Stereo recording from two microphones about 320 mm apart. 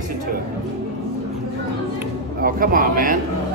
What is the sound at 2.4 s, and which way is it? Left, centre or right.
Speech, right.